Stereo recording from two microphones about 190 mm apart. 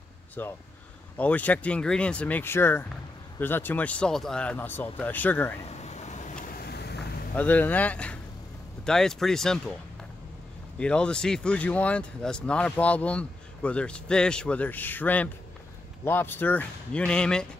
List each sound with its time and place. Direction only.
0.4 s speech: 10° left (ahead or behind)
5.7 s vehicle: 35° left (ahead or behind); by 7.0 s 60° left (ahead or behind)
7.3 s speech: 10° left (ahead or behind)
10.8 s speech: 5° left (ahead or behind)